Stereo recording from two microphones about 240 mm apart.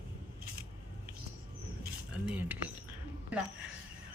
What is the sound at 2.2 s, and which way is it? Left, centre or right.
Speech, centre.